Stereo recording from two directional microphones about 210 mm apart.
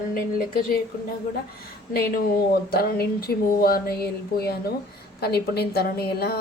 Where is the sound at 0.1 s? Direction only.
40° left (ahead or behind).